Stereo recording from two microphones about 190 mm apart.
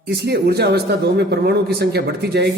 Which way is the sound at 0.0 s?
60° right (ahead or behind).